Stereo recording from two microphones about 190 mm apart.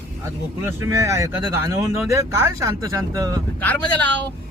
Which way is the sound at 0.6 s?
15° right (ahead or behind).